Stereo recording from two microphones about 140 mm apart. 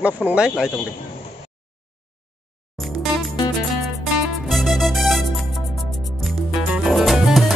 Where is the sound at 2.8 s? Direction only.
Centre (ahead or behind).